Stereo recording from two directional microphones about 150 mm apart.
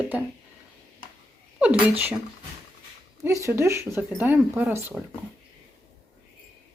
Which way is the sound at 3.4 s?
20° right (ahead or behind).